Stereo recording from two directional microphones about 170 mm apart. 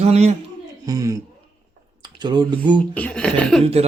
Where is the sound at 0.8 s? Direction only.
20° right (ahead or behind).